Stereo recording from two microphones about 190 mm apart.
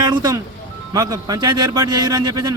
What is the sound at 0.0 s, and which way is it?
A man's voice, 20° right (ahead or behind).